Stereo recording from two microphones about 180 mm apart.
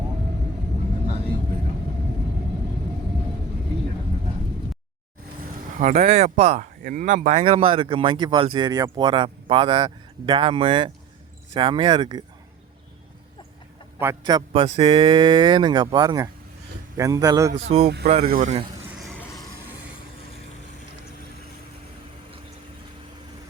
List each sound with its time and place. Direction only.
5.8 s speech: 45° right (ahead or behind); by 12.2 s 25° right (ahead or behind)
14.0 s speech: 20° right (ahead or behind)
17.8 s speech: 65° right (ahead or behind)
18.3 s speech: 50° right (ahead or behind)